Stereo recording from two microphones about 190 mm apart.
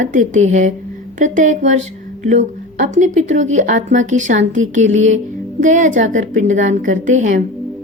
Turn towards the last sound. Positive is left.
turn(degrees=-40)  # may be behind; listen again after turning